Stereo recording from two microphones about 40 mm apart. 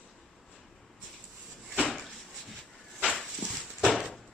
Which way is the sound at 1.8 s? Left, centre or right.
Centre.